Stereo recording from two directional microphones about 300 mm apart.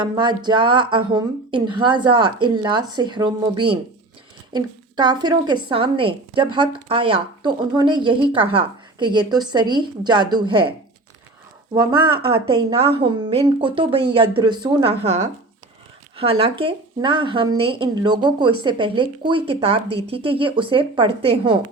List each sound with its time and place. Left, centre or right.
0.0 s speech: centre
4.5 s speech: centre